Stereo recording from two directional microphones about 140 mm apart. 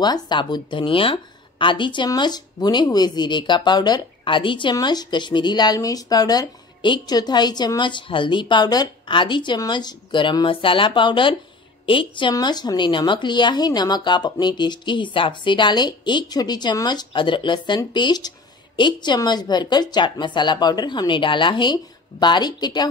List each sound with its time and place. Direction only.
0.0 s speech: 30° left (ahead or behind)